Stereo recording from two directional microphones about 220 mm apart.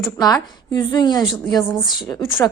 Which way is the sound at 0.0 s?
15° left (ahead or behind).